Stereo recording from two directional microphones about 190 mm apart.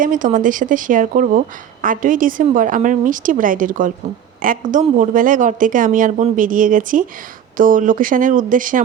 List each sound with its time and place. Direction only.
0.0 s speech: 45° right (ahead or behind)